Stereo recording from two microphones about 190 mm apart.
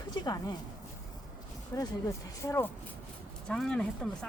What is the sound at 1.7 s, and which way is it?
Speech, 15° left (ahead or behind).